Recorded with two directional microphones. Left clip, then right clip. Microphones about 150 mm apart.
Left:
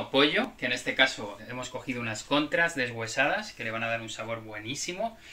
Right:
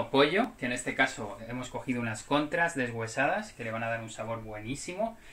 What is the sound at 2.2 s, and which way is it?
Speech, 55° right (ahead or behind).